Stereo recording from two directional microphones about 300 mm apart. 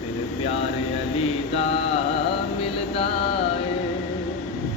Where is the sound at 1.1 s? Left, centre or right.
Centre.